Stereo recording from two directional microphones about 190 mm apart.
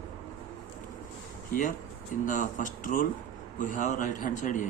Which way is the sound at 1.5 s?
45° left (ahead or behind).